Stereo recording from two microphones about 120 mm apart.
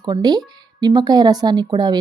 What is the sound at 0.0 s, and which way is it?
Speech, 35° right (ahead or behind).